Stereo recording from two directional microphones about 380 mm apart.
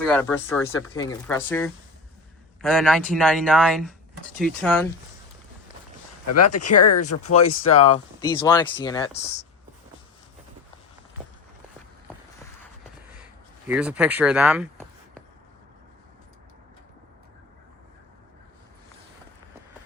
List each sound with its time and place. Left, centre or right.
0.0 s speech: centre
6.2 s speech: left
7.8 s speech: centre
13.7 s speech: centre